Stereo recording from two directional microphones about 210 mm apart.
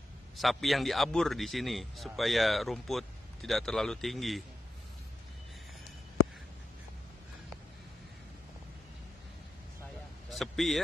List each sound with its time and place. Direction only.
0.4 s a man's voice: centre (ahead or behind)
10.3 s speech: centre (ahead or behind)